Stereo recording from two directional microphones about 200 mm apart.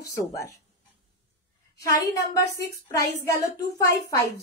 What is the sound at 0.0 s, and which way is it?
Speech, 15° left (ahead or behind).